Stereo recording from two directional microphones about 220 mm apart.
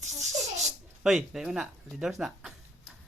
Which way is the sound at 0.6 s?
Centre (ahead or behind).